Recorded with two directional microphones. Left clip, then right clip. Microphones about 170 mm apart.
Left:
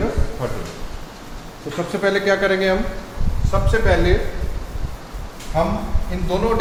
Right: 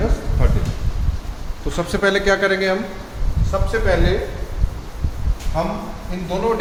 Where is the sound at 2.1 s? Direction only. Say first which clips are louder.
Left 1 dB; 10° right (ahead or behind).